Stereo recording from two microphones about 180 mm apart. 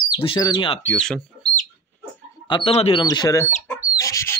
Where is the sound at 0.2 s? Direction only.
25° left (ahead or behind).